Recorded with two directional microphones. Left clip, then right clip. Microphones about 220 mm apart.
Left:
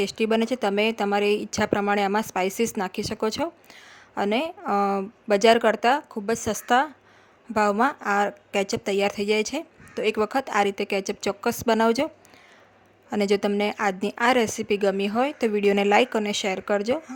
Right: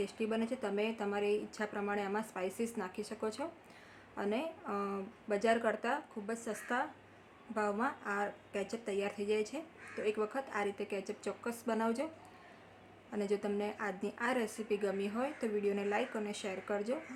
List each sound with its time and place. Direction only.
0.0 s speech: 45° left (ahead or behind)
13.1 s a woman's voice: 45° left (ahead or behind)